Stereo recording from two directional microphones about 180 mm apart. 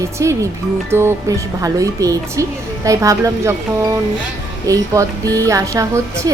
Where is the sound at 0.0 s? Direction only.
15° right (ahead or behind).